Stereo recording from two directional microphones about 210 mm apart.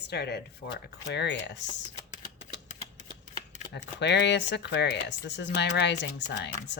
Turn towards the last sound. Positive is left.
turn(degrees=55)  # may be behind; listen again after turning